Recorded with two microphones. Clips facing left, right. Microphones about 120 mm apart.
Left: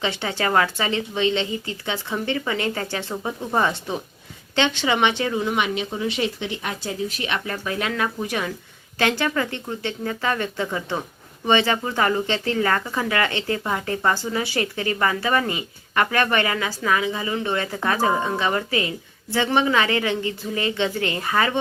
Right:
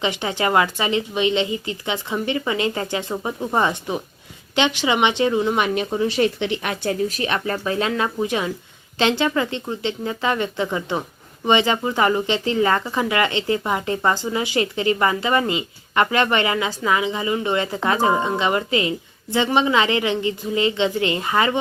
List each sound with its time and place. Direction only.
0.0 s speech: 15° right (ahead or behind)
5.5 s speech: 45° right (ahead or behind)
6.4 s a woman's voice: 75° right (ahead or behind)
7.1 s speech: 40° right (ahead or behind); by 21.6 s 20° right (ahead or behind)